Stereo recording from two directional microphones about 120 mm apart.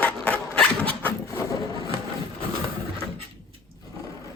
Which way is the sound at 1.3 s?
25° left (ahead or behind).